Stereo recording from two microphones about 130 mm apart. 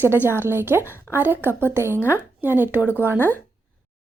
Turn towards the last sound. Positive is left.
turn(degrees=-15)  # may be behind; listen again after turning